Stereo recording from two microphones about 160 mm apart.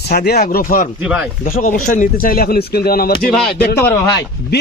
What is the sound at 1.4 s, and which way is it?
Speech, 60° left (ahead or behind).